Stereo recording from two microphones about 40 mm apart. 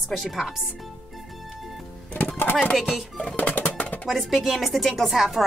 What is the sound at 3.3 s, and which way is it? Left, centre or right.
Music, left.